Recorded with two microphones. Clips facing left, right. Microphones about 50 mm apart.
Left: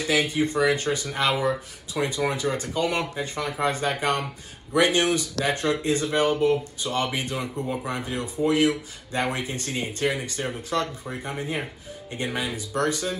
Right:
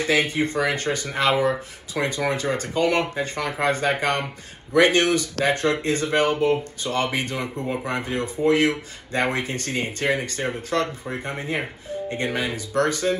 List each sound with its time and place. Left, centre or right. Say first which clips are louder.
0.0 s speech: right 2 dB; right